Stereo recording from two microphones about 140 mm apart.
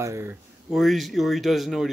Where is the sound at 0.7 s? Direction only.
Centre (ahead or behind).